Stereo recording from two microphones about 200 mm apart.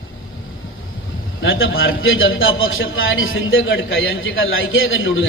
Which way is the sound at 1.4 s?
75° left (ahead or behind).